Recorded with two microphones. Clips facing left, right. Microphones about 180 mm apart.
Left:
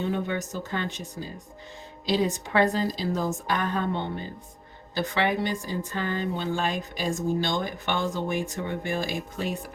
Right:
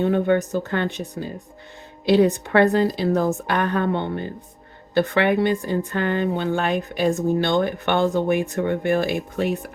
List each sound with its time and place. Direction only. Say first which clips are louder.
0.0 s speech: right 9 dB; 55° right (ahead or behind)